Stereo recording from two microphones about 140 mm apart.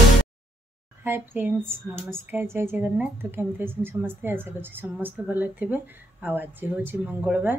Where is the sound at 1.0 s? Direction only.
15° right (ahead or behind).